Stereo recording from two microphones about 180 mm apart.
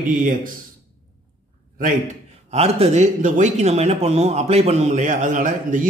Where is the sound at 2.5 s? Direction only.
35° right (ahead or behind).